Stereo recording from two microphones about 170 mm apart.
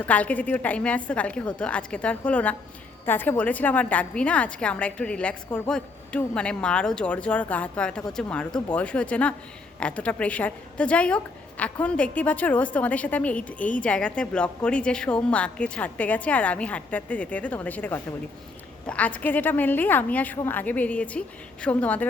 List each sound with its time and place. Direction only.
0.0 s a woman's voice: 10° left (ahead or behind)